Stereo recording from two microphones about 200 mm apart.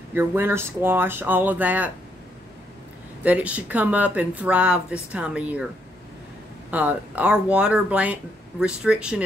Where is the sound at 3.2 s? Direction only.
5° right (ahead or behind).